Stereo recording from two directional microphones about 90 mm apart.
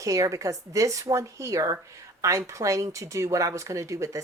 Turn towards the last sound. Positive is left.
turn(degrees=-35)  # may be behind; listen again after turning